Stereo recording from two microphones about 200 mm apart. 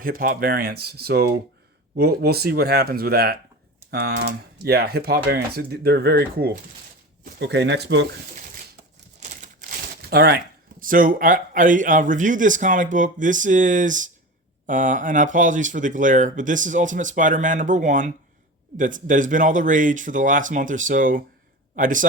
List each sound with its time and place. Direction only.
0.0 s speech: 45° right (ahead or behind)
8.4 s a sound: 45° right (ahead or behind)
9.4 s speech: 40° right (ahead or behind)